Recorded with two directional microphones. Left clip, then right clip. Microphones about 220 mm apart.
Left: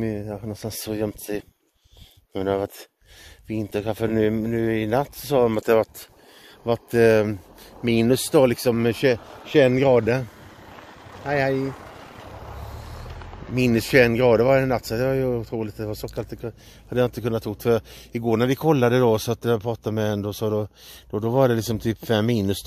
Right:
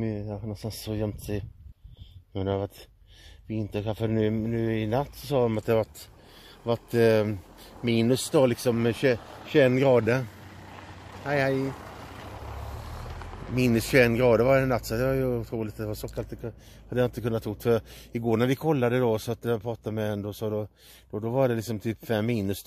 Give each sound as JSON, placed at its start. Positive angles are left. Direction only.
{"t": 0.0, "sound": "speech", "side_deg": 55}
{"t": 6.6, "sound": "speech", "side_deg": 35}
{"t": 9.2, "sound": "a sound", "side_deg": -50}
{"t": 9.5, "sound": "speech", "side_deg": 20}
{"t": 10.7, "sound": "vehicle", "side_deg": -45}
{"t": 11.2, "sound": "speech", "side_deg": 15}
{"t": 11.6, "sound": "a sound", "side_deg": -30}
{"t": 13.6, "sound": "speech", "side_deg": 20}
{"t": 16.2, "sound": "speech", "side_deg": 35}